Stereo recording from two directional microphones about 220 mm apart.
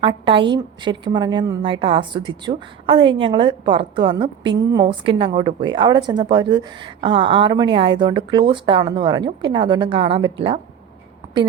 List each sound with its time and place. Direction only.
0.0 s a woman's voice: 20° right (ahead or behind)